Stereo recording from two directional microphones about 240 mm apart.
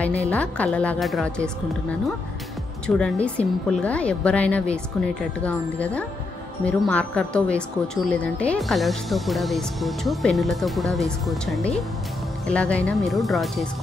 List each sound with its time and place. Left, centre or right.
0.3 s speech: centre